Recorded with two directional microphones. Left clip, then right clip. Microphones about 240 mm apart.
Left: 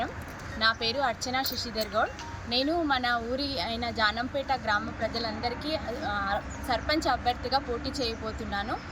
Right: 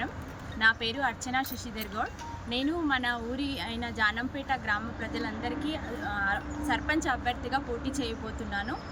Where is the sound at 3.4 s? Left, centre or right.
Centre.